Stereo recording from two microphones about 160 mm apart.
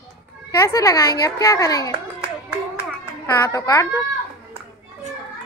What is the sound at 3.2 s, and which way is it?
Speech, 25° left (ahead or behind).